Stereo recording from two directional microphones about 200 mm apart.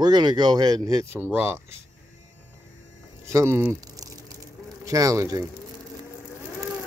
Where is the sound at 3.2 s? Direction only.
15° right (ahead or behind).